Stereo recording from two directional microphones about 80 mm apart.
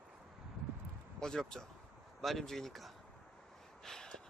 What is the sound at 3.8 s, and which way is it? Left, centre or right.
Gasp, centre.